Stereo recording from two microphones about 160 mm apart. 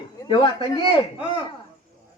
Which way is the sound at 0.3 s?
30° left (ahead or behind).